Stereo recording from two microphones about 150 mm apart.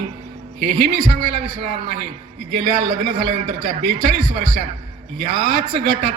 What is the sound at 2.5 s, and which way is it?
A man's voice, 65° right (ahead or behind).